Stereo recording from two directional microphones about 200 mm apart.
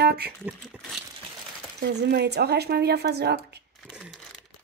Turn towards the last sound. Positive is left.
turn(degrees=-55)  # may be behind; listen again after turning